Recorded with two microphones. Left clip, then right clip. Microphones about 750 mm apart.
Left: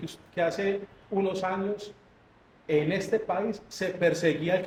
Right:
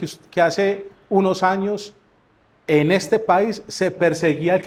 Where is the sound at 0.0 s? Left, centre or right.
Right.